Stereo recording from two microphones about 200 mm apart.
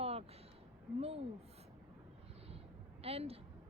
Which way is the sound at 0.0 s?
30° right (ahead or behind).